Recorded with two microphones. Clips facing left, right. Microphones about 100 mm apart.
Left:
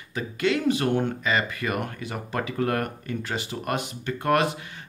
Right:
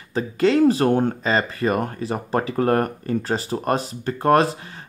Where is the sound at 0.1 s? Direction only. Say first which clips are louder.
Right 6 dB; 35° right (ahead or behind).